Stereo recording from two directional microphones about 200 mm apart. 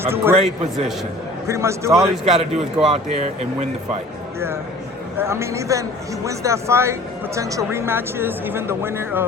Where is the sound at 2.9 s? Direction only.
30° right (ahead or behind).